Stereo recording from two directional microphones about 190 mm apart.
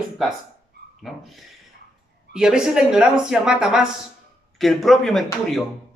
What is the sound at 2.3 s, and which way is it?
A man's voice, 5° right (ahead or behind).